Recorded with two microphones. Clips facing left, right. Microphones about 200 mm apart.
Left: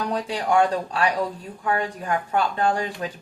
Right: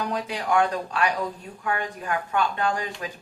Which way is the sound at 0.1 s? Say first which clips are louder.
Left 4 dB; 30° left (ahead or behind).